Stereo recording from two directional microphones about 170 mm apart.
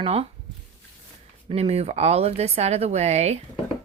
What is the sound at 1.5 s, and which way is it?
A woman's voice, 35° right (ahead or behind).